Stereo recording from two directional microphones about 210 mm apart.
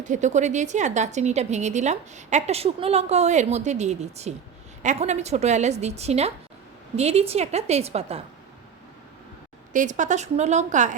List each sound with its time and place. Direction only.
0.0 s a woman's voice: 35° right (ahead or behind)
9.7 s a woman's voice: 35° right (ahead or behind)